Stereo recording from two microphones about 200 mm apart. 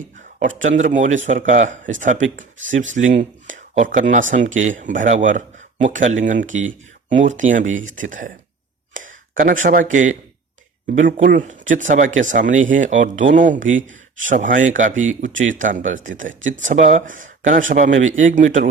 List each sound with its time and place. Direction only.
0.0 s a man's voice: 40° right (ahead or behind)
9.0 s a sound: 40° right (ahead or behind)
9.6 s a man's voice: 45° right (ahead or behind)
15.3 s speech: 75° right (ahead or behind)
15.5 s a man's voice: 40° right (ahead or behind)